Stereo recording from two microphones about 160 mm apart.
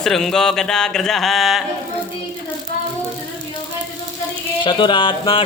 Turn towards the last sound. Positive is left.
turn(degrees=35)  # may be behind; listen again after turning